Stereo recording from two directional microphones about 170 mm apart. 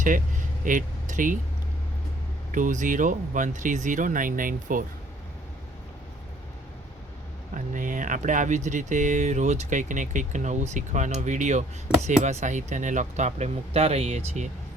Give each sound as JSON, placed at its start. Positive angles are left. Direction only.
{"t": 0.6, "sound": "speech", "side_deg": -50}
{"t": 2.5, "sound": "speech", "side_deg": -50}
{"t": 7.5, "sound": "speech", "side_deg": -50}